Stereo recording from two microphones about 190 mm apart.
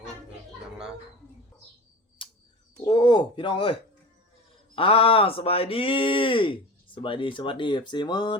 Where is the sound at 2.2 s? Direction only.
25° left (ahead or behind).